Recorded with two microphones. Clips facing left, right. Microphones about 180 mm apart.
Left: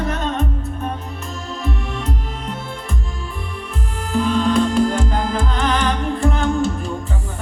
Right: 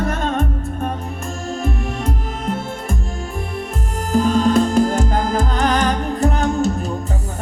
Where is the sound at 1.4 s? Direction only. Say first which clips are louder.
Right 3 dB; 45° right (ahead or behind).